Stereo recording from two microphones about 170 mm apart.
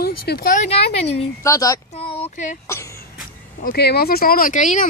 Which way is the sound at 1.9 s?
35° left (ahead or behind).